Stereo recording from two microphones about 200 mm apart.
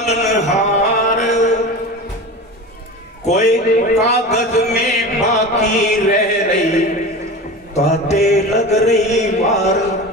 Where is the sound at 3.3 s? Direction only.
35° left (ahead or behind).